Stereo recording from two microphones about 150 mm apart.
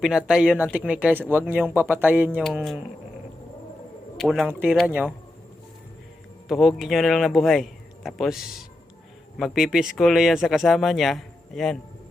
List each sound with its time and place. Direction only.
0.0 s speech: 5° right (ahead or behind)
4.2 s speech: centre (ahead or behind)
4.4 s speech: 10° right (ahead or behind)
6.5 s speech: centre (ahead or behind)